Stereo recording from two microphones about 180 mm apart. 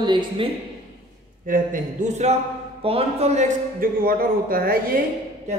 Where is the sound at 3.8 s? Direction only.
55° right (ahead or behind).